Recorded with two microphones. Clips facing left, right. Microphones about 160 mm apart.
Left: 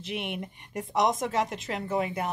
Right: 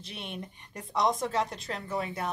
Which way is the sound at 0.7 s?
20° left (ahead or behind).